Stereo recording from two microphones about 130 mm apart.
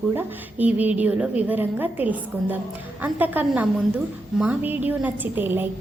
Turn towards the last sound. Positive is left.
turn(degrees=-15)  # may be behind; listen again after turning